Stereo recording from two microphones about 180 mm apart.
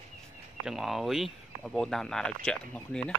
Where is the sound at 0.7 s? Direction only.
Centre (ahead or behind).